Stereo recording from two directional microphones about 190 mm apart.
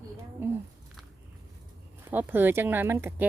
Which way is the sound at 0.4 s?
10° right (ahead or behind).